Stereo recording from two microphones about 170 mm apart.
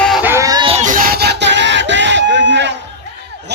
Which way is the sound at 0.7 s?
45° right (ahead or behind).